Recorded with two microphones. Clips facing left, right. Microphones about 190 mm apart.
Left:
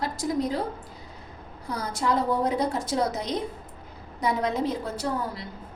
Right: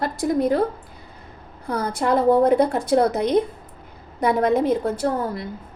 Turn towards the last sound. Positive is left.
turn(degrees=-50)  # may be behind; listen again after turning